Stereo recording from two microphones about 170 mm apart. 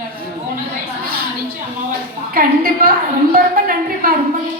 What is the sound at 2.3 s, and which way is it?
Speech, 60° right (ahead or behind).